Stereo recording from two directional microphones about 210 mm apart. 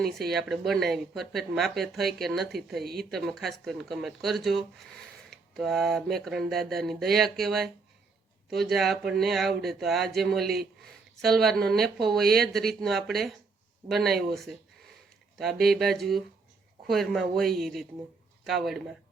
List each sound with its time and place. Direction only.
0.0 s speech: centre (ahead or behind)